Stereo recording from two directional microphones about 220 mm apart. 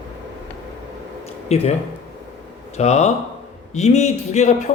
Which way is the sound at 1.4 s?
30° left (ahead or behind).